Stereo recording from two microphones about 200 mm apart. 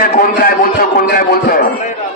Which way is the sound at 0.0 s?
45° left (ahead or behind).